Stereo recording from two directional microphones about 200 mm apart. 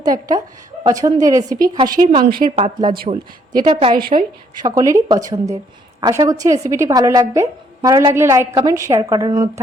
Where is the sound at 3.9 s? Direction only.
45° right (ahead or behind).